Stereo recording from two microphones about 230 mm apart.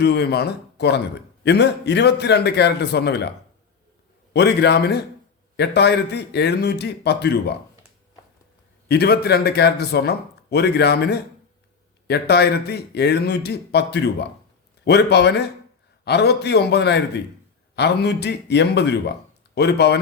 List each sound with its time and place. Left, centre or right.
0.0 s speech: left
4.4 s speech: left
8.9 s speech: left